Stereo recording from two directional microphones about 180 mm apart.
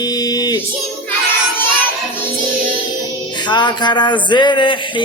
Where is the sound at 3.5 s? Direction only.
25° left (ahead or behind).